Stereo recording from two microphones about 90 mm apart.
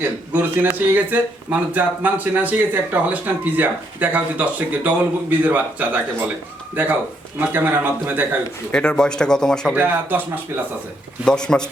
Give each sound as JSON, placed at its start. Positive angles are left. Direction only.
{"t": 0.3, "sound": "speech", "side_deg": -20}
{"t": 8.7, "sound": "speech", "side_deg": 10}
{"t": 9.7, "sound": "speech", "side_deg": -20}
{"t": 11.3, "sound": "speech", "side_deg": 10}